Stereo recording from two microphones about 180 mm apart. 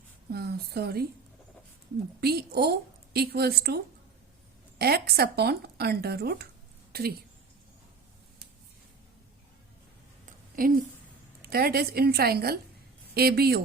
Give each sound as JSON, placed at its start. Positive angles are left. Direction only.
{"t": 0.3, "sound": "speech", "side_deg": -60}
{"t": 2.2, "sound": "speech", "side_deg": -60}
{"t": 4.8, "sound": "speech", "side_deg": -60}
{"t": 10.2, "sound": "a sound", "side_deg": -50}
{"t": 11.4, "sound": "speech", "side_deg": -60}